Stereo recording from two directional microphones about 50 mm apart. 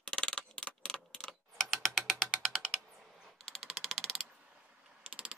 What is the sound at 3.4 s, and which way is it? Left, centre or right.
Typing, centre.